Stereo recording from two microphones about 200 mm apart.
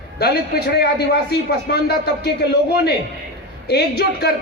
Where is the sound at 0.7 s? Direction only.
55° left (ahead or behind).